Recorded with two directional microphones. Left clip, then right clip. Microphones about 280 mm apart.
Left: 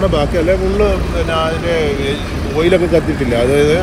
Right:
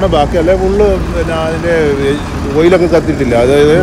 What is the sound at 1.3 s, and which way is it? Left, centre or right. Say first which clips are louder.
Speech: right 3 dB; right.